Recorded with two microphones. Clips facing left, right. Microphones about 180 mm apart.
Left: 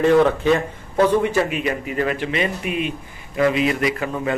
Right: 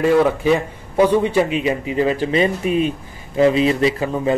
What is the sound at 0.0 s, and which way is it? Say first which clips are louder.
A man's voice: even; 5° right (ahead or behind).